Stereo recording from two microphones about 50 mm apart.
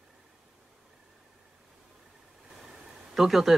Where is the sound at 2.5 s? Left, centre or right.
Centre.